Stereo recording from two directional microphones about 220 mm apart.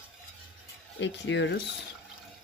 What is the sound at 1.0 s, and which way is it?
Speech, 55° left (ahead or behind).